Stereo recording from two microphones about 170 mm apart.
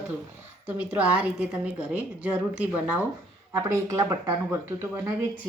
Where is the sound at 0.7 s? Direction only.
10° right (ahead or behind).